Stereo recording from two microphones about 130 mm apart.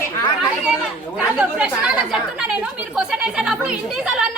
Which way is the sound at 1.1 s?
10° right (ahead or behind).